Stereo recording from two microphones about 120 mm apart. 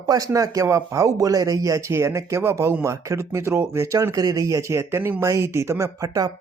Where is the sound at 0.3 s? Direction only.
30° right (ahead or behind).